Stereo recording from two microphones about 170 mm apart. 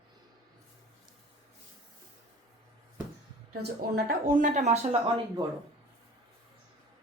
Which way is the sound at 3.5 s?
65° right (ahead or behind).